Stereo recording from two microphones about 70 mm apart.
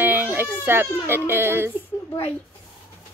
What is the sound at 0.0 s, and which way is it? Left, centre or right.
Baby cry, right.